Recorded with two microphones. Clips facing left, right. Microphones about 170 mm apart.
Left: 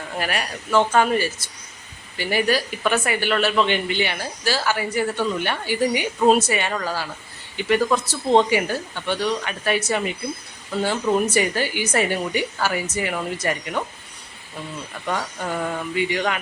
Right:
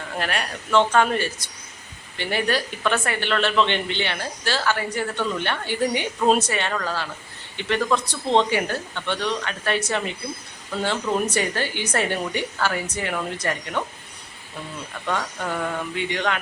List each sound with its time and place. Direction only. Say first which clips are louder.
0.2 s speech: left 1 dB; 5° left (ahead or behind)
15.0 s speech: even; 10° left (ahead or behind)